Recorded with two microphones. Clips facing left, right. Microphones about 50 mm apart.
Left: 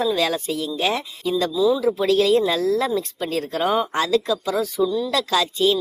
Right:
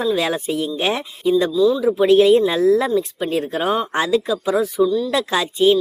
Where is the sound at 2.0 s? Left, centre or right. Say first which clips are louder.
Right 9 dB; right.